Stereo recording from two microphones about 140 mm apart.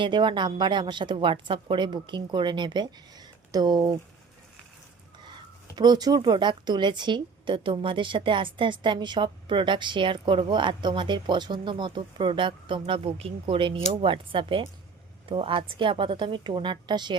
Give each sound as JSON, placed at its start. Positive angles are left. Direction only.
{"t": 0.0, "sound": "speech", "side_deg": -35}
{"t": 5.7, "sound": "speech", "side_deg": -30}